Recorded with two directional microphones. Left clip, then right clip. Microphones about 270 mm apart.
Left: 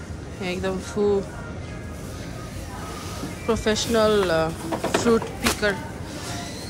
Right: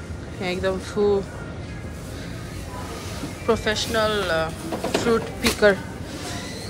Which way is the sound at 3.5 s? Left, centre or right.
Centre.